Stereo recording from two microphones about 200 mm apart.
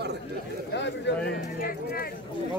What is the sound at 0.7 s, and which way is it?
Speech, 60° left (ahead or behind).